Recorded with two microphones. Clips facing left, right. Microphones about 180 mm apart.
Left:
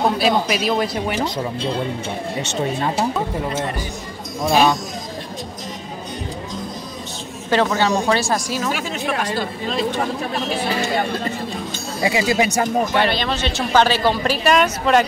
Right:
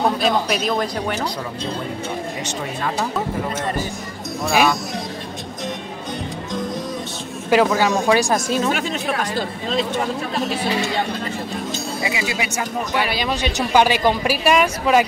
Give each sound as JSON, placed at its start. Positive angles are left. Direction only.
{"t": 0.2, "sound": "a man's voice", "side_deg": 5}
{"t": 7.4, "sound": "a woman's voice", "side_deg": -10}
{"t": 12.0, "sound": "speech", "side_deg": 40}
{"t": 12.9, "sound": "a woman's voice", "side_deg": -10}